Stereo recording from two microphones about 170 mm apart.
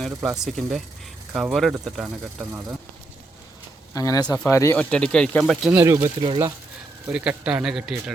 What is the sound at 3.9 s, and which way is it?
A man's voice, 20° left (ahead or behind).